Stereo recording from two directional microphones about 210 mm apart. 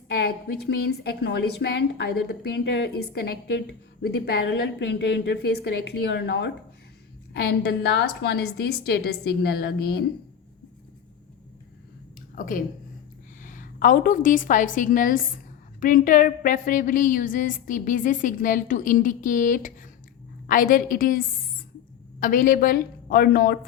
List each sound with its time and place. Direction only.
0.1 s a woman's voice: 50° left (ahead or behind)
12.3 s a woman's voice: 40° left (ahead or behind)